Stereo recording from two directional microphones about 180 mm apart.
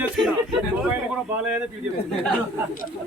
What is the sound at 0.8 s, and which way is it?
Speech, 5° right (ahead or behind).